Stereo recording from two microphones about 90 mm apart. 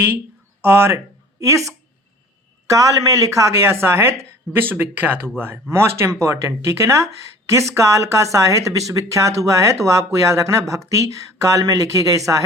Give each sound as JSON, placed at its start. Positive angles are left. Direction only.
{"t": 0.6, "sound": "speech", "side_deg": -25}
{"t": 2.6, "sound": "speech", "side_deg": -40}